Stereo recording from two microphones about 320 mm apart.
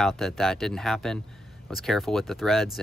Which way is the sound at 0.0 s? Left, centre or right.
Centre.